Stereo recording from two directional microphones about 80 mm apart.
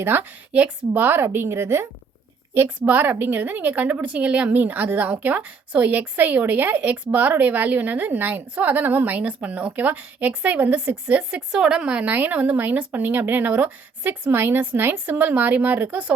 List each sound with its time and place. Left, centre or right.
0.0 s a woman's voice: right
2.6 s a woman's voice: right